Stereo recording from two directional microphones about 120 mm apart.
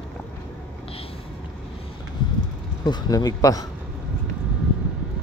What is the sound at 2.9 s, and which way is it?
Speech, 35° left (ahead or behind).